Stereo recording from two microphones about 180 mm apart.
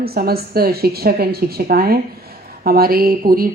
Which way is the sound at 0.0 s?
60° right (ahead or behind).